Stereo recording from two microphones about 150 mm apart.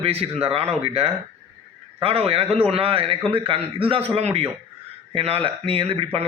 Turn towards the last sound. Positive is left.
turn(degrees=-40)  # may be behind; listen again after turning